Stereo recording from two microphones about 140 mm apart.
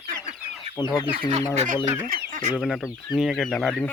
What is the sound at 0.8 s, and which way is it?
Speech, 30° left (ahead or behind).